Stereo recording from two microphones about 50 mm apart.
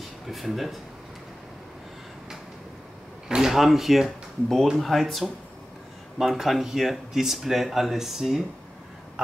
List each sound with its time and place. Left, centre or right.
0.3 s speech: centre
3.3 s speech: centre